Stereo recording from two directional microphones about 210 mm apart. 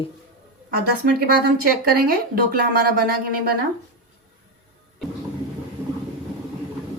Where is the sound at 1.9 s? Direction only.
45° right (ahead or behind).